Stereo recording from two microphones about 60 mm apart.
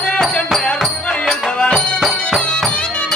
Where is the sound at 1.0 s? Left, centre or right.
Centre.